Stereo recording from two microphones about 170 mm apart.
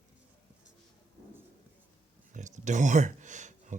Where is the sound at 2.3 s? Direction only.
45° right (ahead or behind).